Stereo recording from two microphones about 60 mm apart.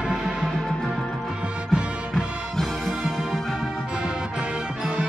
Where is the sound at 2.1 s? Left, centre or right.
Centre.